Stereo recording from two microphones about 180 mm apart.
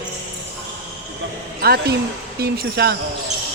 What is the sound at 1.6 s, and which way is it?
Speech, 60° right (ahead or behind).